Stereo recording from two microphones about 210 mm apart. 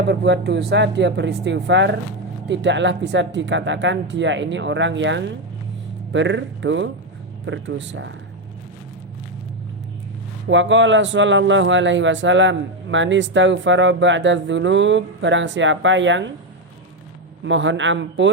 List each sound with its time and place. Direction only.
0.1 s a man's voice: 55° right (ahead or behind)
10.5 s a man's voice: 60° right (ahead or behind)
17.4 s a man's voice: 60° right (ahead or behind)